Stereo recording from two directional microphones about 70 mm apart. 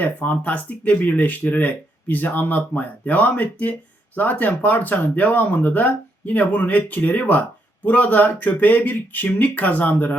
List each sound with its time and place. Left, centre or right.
0.0 s speech: left